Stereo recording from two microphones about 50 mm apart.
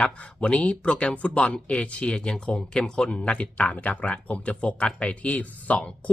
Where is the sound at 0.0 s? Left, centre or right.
Left.